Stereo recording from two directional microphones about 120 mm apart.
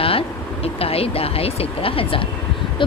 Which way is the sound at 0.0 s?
50° left (ahead or behind).